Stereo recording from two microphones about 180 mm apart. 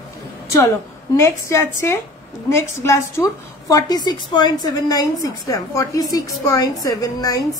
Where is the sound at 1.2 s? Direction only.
15° left (ahead or behind).